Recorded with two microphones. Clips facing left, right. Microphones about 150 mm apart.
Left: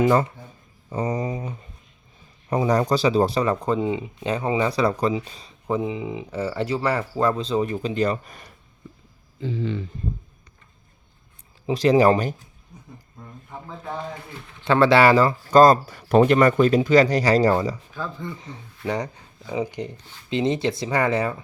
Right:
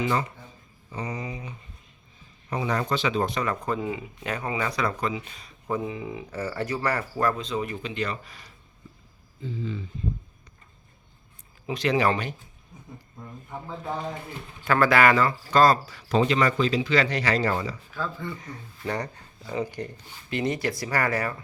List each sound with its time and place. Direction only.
0.0 s a sound: 45° left (ahead or behind)
2.5 s speech: 40° left (ahead or behind)
5.6 s speech: 20° left (ahead or behind); by 8.5 s 50° left (ahead or behind)
9.4 s speech: 75° left (ahead or behind)
11.6 s speech: 35° left (ahead or behind)
13.5 s speech: 5° right (ahead or behind)
14.6 s speech: 25° left (ahead or behind)
18.0 s speech: 20° left (ahead or behind)
18.8 s speech: 10° left (ahead or behind)